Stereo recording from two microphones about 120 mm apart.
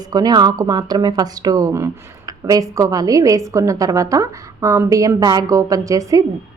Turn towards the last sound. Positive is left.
turn(degrees=-30)  # may be behind; listen again after turning